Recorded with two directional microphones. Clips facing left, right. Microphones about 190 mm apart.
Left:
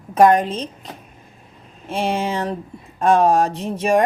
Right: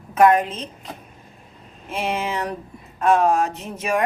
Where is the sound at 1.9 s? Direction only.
30° left (ahead or behind).